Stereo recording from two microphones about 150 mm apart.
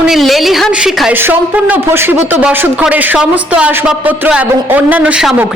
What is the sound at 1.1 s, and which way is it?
Speech, 15° right (ahead or behind).